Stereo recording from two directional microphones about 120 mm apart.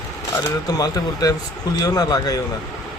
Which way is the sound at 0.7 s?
30° left (ahead or behind).